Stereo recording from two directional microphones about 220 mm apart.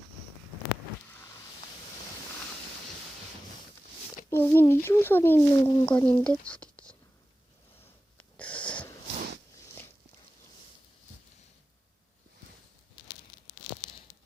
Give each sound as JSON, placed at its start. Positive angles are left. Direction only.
{"t": 4.3, "sound": "speech", "side_deg": 10}
{"t": 5.6, "sound": "speech", "side_deg": 20}
{"t": 6.2, "sound": "speech", "side_deg": 5}
{"t": 8.2, "sound": "wheeze", "side_deg": 5}